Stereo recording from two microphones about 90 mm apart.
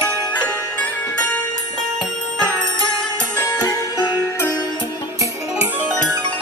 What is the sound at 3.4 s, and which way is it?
Music, 45° left (ahead or behind).